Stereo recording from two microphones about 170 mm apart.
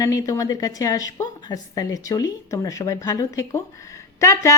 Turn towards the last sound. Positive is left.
turn(degrees=20)  # may be behind; listen again after turning